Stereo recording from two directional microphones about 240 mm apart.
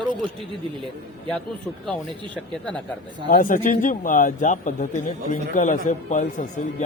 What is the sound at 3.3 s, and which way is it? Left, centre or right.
Speech, left.